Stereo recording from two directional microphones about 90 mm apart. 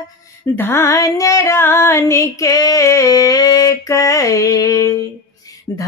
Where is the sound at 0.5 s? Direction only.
25° left (ahead or behind).